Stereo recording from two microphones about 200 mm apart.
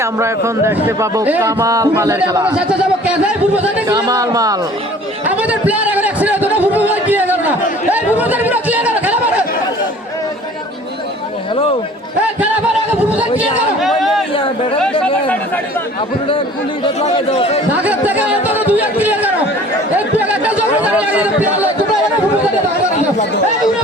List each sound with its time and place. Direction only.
0.0 s speech: 15° right (ahead or behind)
3.8 s speech: 20° right (ahead or behind)
5.2 s a sound: 5° right (ahead or behind)
8.2 s speech: 10° right (ahead or behind)
13.8 s a sound: centre (ahead or behind)
14.3 s chatter: 25° left (ahead or behind)
16.8 s speech: 30° left (ahead or behind)
17.8 s speech: 10° right (ahead or behind)